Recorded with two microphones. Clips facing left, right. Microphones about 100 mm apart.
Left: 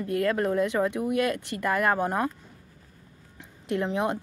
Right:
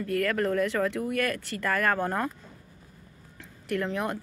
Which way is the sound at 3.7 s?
20° left (ahead or behind).